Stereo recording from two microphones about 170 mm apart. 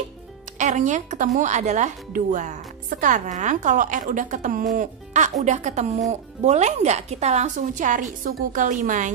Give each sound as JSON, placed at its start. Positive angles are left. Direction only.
{"t": 0.6, "sound": "speech", "side_deg": -45}